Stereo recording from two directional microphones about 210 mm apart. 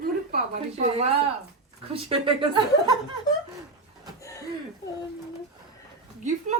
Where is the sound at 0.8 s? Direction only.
30° right (ahead or behind).